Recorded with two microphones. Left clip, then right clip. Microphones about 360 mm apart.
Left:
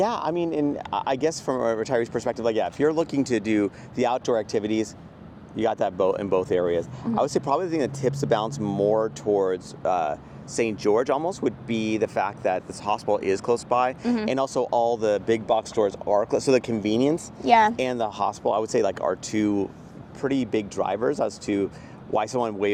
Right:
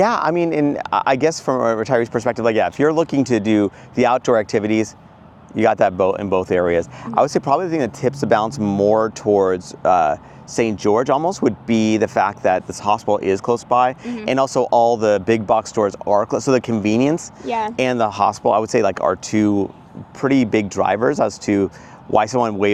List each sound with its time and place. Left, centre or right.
0.0 s speech: right
17.4 s speech: left
17.7 s speech: right